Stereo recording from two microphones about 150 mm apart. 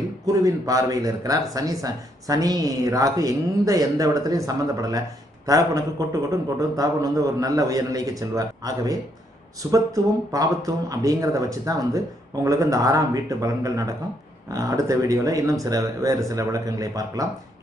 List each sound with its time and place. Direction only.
0.3 s speech: 25° right (ahead or behind)